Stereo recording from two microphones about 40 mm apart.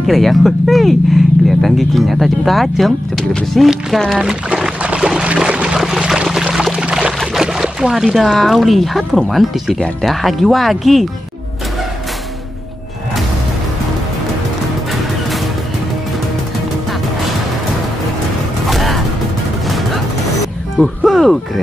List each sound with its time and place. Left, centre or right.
0.0 s speech: centre
4.8 s boat: right
5.5 s a sound: right
5.9 s pour: centre
6.8 s pour: right
7.3 s speech: centre
18.7 s music: centre
20.7 s music: centre